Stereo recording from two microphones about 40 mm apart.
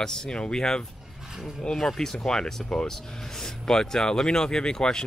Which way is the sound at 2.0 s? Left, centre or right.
Centre.